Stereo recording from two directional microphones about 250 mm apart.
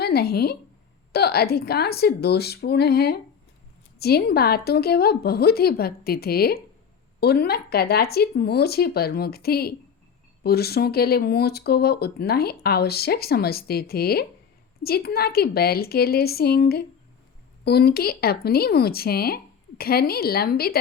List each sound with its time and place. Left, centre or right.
0.0 s speech: left